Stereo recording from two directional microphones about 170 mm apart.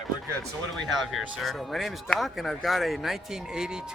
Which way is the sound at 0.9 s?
Centre (ahead or behind).